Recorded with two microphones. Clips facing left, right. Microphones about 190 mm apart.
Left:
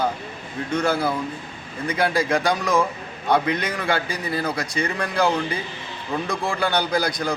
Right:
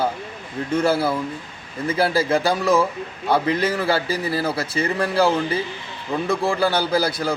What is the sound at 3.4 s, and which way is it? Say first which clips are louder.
Speech: right 4 dB; 30° right (ahead or behind).